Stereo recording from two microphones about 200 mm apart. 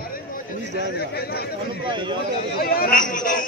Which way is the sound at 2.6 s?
50° left (ahead or behind).